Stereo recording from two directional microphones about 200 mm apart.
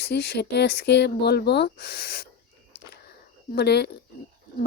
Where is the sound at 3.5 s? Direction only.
55° left (ahead or behind).